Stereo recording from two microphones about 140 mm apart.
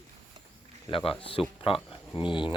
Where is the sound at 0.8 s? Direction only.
40° left (ahead or behind).